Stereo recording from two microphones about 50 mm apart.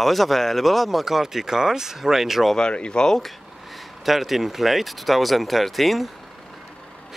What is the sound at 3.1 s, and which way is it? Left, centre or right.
Speech, centre.